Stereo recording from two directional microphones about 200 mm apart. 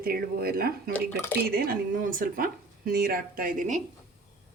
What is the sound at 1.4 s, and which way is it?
A woman's voice, 50° right (ahead or behind).